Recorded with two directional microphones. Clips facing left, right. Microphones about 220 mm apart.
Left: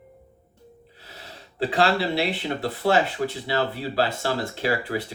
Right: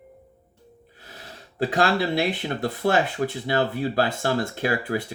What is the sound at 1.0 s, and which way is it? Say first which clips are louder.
Speech: right 1 dB; 50° right (ahead or behind).